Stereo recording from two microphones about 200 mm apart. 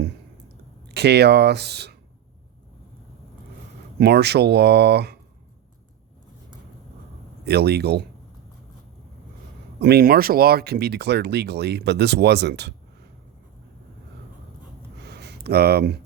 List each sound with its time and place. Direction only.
0.9 s speech: 55° right (ahead or behind)
4.0 s speech: 55° right (ahead or behind)
7.4 s speech: 55° right (ahead or behind)
9.8 s speech: 50° right (ahead or behind)
15.0 s a sound: 55° right (ahead or behind)